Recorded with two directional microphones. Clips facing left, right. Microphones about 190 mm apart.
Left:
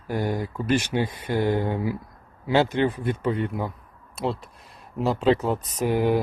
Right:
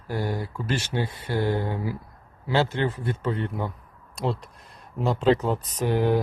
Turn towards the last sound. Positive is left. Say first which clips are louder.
# left 1 dB
turn(degrees=10)  # may be behind; listen again after turning